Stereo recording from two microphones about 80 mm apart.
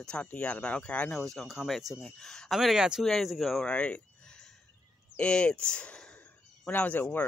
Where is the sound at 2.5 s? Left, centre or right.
Centre.